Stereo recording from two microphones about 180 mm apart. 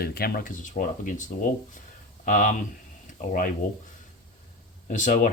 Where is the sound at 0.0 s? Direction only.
60° left (ahead or behind).